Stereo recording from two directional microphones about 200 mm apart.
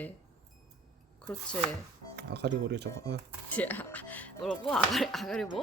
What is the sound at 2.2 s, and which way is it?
Speech, 55° right (ahead or behind).